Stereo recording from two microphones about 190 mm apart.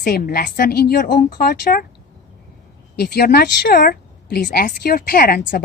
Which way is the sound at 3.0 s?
55° left (ahead or behind).